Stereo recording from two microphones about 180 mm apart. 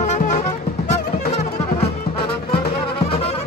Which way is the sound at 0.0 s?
40° left (ahead or behind).